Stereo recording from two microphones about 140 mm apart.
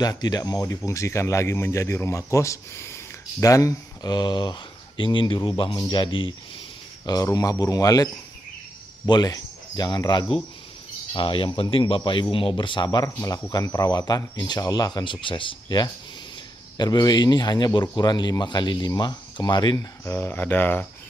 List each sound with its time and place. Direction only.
0.0 s speech: 30° left (ahead or behind)
7.1 s speech: 25° left (ahead or behind)
20.1 s speech: 15° left (ahead or behind)